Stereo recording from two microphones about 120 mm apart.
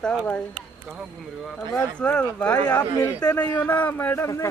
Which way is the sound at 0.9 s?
5° right (ahead or behind).